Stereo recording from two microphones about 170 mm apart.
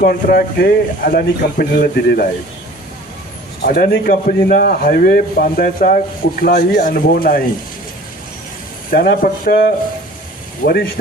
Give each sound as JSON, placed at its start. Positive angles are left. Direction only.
{"t": 0.0, "sound": "a man's voice", "side_deg": 60}
{"t": 3.7, "sound": "a man's voice", "side_deg": 60}
{"t": 6.4, "sound": "a man's voice", "side_deg": 65}
{"t": 8.9, "sound": "a man's voice", "side_deg": 55}